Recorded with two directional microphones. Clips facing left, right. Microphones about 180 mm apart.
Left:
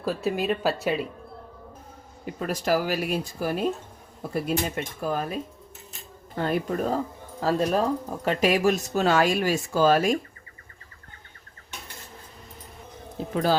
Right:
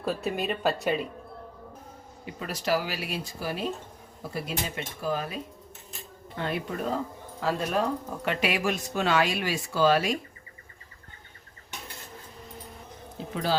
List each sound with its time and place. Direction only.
0.0 s speech: centre (ahead or behind)
2.2 s speech: 45° left (ahead or behind)
13.3 s speech: 45° left (ahead or behind)